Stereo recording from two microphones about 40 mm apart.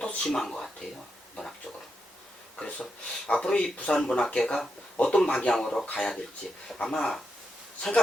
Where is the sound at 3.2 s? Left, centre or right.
Left.